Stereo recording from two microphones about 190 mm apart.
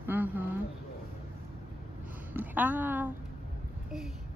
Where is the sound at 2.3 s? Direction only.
10° right (ahead or behind).